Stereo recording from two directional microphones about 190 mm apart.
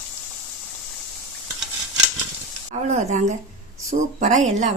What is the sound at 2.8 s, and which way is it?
Speech, 35° right (ahead or behind).